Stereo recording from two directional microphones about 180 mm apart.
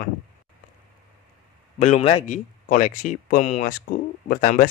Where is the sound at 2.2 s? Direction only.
45° left (ahead or behind).